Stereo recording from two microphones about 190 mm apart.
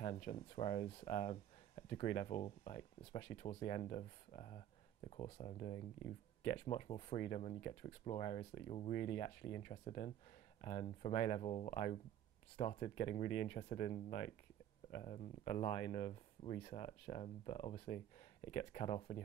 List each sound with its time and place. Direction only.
0.0 s speech: 30° left (ahead or behind)